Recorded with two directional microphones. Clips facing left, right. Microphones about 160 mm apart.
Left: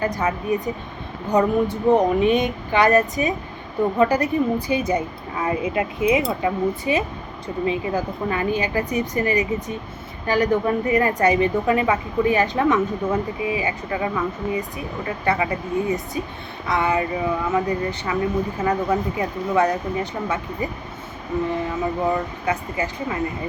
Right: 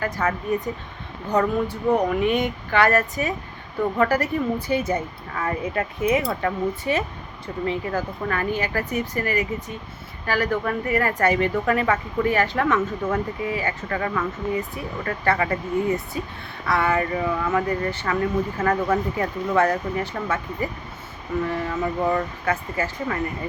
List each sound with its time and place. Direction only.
0.0 s a woman's voice: 20° left (ahead or behind)
22.1 s a woman's voice: 20° left (ahead or behind)